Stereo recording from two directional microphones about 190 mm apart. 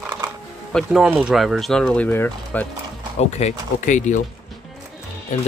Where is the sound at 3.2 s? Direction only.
35° left (ahead or behind).